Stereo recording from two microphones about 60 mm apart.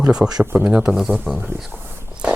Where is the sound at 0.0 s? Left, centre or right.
Centre.